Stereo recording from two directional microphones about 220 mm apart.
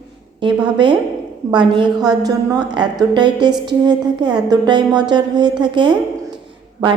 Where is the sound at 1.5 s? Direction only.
20° right (ahead or behind).